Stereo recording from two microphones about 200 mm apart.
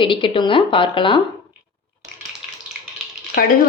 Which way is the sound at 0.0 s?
25° left (ahead or behind).